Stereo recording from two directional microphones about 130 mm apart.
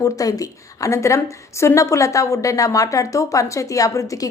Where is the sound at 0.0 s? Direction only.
25° left (ahead or behind).